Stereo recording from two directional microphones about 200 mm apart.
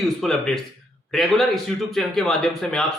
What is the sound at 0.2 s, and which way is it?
A man's voice, centre (ahead or behind).